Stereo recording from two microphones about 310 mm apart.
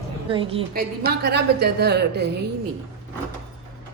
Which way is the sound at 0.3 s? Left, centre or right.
Centre.